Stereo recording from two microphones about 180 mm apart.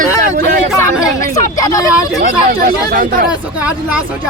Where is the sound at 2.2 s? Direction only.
55° right (ahead or behind).